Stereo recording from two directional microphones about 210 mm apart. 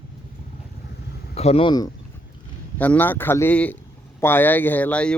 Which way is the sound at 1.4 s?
30° left (ahead or behind).